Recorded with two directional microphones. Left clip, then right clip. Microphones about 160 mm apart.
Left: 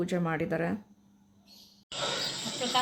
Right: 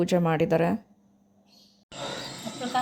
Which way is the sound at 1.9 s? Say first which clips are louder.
Left 3 dB; 55° right (ahead or behind).